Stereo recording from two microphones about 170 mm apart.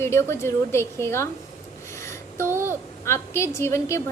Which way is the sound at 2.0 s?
15° left (ahead or behind).